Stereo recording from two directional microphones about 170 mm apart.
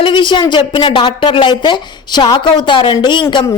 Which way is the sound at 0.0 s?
30° left (ahead or behind).